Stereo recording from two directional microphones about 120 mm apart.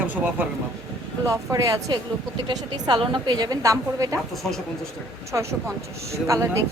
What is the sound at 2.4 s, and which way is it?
A woman's voice, 40° right (ahead or behind).